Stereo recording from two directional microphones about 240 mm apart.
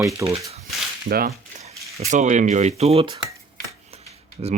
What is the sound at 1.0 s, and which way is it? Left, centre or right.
Speech, right.